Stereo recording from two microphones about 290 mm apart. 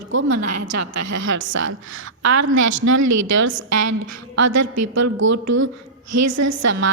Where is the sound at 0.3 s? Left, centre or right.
Right.